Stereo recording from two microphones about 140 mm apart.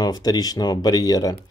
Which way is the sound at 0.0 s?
30° left (ahead or behind).